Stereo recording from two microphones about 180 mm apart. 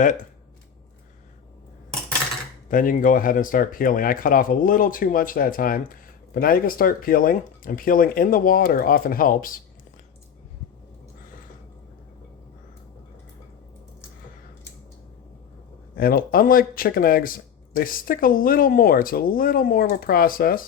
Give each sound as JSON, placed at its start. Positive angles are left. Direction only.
{"t": 2.6, "sound": "speech", "side_deg": 50}
{"t": 16.0, "sound": "speech", "side_deg": 55}